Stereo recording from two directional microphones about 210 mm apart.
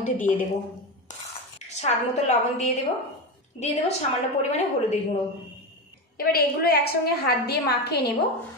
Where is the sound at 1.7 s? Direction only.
35° left (ahead or behind).